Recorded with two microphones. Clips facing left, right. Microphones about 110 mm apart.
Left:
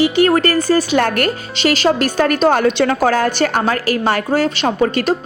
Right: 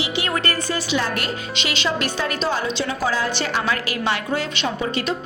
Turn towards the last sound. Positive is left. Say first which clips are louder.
# left 8 dB
turn(degrees=50)  # may be behind; listen again after turning